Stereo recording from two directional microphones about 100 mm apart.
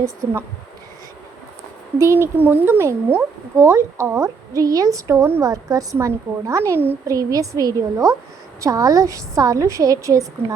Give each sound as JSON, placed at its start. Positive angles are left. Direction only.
{"t": 0.0, "sound": "a woman's voice", "side_deg": -30}
{"t": 2.0, "sound": "speech", "side_deg": -25}
{"t": 4.5, "sound": "a woman's voice", "side_deg": -35}
{"t": 7.1, "sound": "a woman's voice", "side_deg": -35}